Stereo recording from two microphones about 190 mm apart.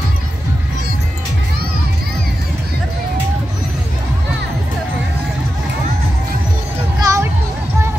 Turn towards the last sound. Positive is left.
turn(degrees=-15)  # may be behind; listen again after turning